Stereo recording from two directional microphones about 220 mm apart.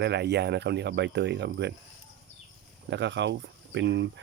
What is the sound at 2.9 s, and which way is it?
Speech, 50° right (ahead or behind).